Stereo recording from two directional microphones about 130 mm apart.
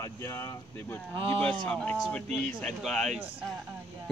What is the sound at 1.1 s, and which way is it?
Speech, 45° right (ahead or behind).